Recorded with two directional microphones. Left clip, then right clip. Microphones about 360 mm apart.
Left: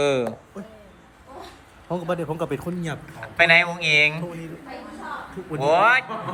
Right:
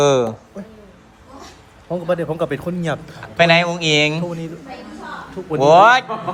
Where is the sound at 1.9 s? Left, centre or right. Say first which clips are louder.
Right 6 dB; centre.